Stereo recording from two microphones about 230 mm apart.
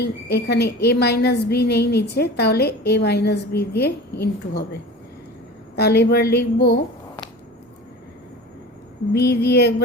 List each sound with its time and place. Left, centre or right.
0.0 s a woman's voice: left
5.7 s a woman's voice: left
9.1 s a woman's voice: left